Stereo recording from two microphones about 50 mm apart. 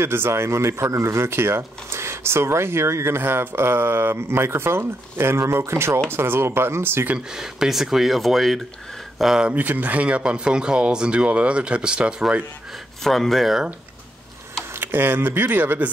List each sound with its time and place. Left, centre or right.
0.0 s speech: right
6.0 s speech: right
7.2 s speech: centre
9.5 s speech: right; by 12.4 s centre
13.0 s speech: centre
14.8 s speech: right